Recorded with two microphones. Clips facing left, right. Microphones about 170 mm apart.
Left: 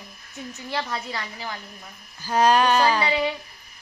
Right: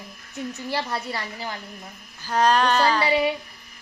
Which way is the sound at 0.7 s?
5° right (ahead or behind).